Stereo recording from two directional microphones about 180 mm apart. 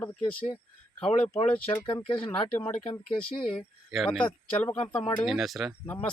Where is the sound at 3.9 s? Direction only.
Centre (ahead or behind).